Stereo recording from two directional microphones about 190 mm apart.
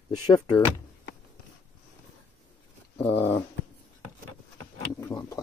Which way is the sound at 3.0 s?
10° left (ahead or behind).